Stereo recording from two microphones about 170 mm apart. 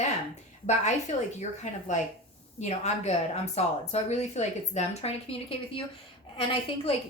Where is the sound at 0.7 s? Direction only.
45° left (ahead or behind).